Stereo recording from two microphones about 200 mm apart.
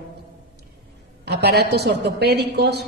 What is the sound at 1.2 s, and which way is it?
A woman's voice, 55° right (ahead or behind).